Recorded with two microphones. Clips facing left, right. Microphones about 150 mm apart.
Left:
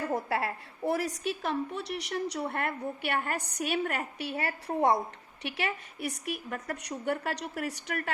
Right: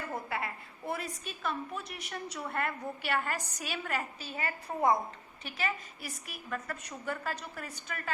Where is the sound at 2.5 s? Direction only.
60° left (ahead or behind).